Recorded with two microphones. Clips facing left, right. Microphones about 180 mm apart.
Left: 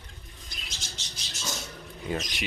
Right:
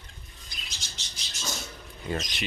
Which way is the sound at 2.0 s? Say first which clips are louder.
Even; 10° left (ahead or behind).